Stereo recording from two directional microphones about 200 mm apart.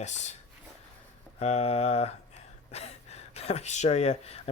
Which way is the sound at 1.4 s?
35° left (ahead or behind).